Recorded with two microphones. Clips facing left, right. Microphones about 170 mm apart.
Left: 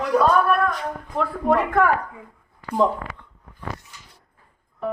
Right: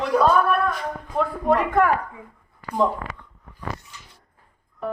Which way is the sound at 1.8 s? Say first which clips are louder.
Even; centre (ahead or behind).